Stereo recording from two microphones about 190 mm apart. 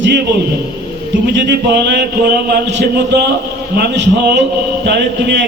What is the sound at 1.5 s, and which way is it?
Speech, 65° right (ahead or behind).